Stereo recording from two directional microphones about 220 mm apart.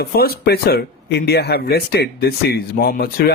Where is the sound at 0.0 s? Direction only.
45° left (ahead or behind).